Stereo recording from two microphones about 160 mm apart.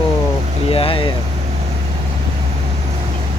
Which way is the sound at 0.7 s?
35° left (ahead or behind).